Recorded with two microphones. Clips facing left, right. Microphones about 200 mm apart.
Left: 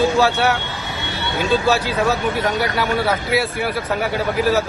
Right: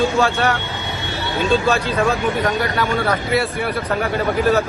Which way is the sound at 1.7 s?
5° left (ahead or behind).